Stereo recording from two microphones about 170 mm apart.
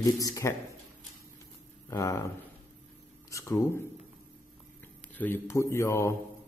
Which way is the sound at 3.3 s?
15° left (ahead or behind).